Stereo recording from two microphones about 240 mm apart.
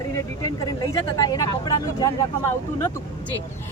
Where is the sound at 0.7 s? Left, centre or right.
Centre.